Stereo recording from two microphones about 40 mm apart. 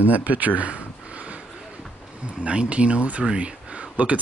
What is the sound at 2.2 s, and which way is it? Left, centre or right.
Speech, right.